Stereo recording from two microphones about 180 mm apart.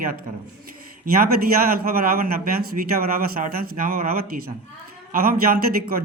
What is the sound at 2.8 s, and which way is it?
Speech, 50° right (ahead or behind).